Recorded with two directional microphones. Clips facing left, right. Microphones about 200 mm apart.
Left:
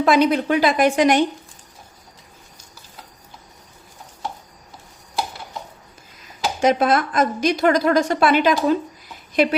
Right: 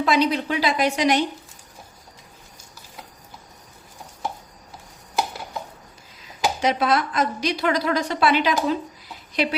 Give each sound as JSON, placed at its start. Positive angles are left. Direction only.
{"t": 0.0, "sound": "a woman's voice", "side_deg": 50}
{"t": 6.6, "sound": "a woman's voice", "side_deg": 50}